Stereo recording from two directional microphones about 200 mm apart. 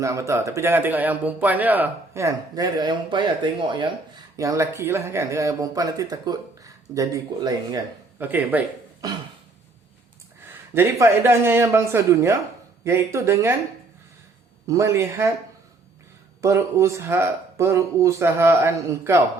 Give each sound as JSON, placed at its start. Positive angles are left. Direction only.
{"t": 0.0, "sound": "a man's voice", "side_deg": -15}
{"t": 8.2, "sound": "speech", "side_deg": -10}
{"t": 10.8, "sound": "a man's voice", "side_deg": -10}
{"t": 14.7, "sound": "a man's voice", "side_deg": -15}
{"t": 16.4, "sound": "a man's voice", "side_deg": -15}